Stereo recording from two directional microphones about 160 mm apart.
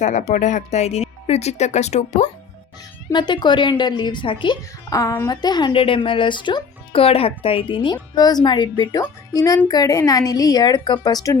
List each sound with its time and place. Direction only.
0.0 s speech: 50° left (ahead or behind)
3.1 s speech: 30° left (ahead or behind)